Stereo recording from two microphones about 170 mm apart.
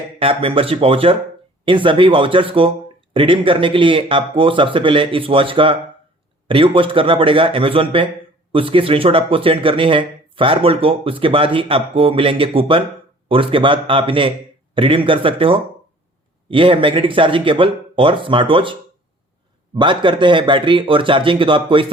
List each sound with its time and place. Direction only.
0.2 s speech: 35° right (ahead or behind)